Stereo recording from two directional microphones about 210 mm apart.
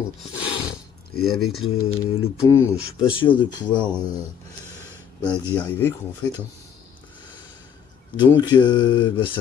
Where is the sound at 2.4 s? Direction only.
10° left (ahead or behind).